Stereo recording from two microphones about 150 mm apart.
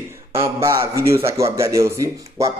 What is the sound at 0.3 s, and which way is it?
A man's voice, 20° right (ahead or behind).